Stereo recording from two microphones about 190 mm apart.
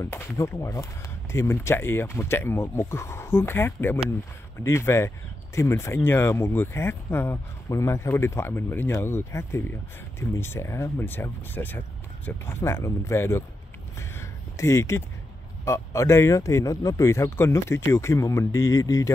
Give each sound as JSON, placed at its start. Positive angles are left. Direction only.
{"t": 0.0, "sound": "speech", "side_deg": 15}
{"t": 13.9, "sound": "a sound", "side_deg": 15}
{"t": 15.6, "sound": "speech", "side_deg": 15}